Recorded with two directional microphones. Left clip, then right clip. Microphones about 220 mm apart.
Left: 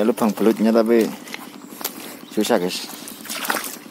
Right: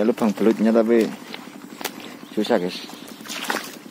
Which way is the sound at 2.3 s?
20° left (ahead or behind).